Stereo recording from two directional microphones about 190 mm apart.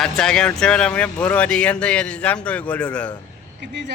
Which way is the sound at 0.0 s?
5° left (ahead or behind).